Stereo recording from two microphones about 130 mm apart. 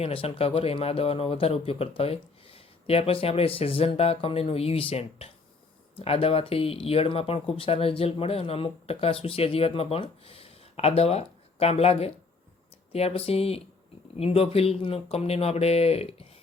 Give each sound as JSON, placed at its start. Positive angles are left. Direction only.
{"t": 0.0, "sound": "speech", "side_deg": 50}